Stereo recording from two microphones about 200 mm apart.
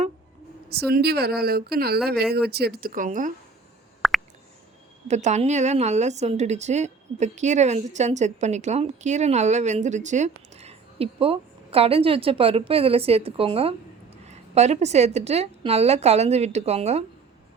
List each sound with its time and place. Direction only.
0.7 s speech: 50° right (ahead or behind)
4.0 s a sound: centre (ahead or behind)
5.0 s a woman's voice: 35° right (ahead or behind)